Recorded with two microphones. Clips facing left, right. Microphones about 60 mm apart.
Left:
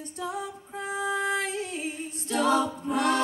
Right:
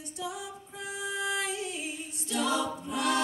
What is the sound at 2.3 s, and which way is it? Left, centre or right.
A capella, left.